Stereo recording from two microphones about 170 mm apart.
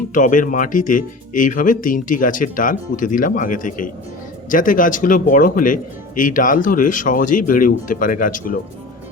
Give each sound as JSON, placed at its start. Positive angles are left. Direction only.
{"t": 0.1, "sound": "speech", "side_deg": 50}